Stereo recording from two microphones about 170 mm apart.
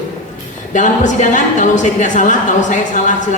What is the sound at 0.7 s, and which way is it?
A woman's voice, 45° left (ahead or behind).